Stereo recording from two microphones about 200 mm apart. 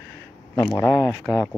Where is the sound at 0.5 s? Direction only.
15° left (ahead or behind).